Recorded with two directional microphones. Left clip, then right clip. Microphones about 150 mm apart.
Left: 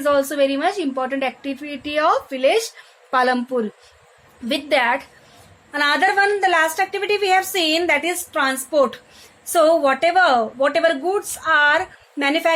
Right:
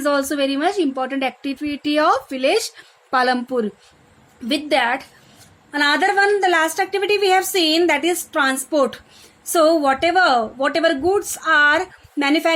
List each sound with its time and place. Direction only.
0.0 s a woman's voice: 40° right (ahead or behind)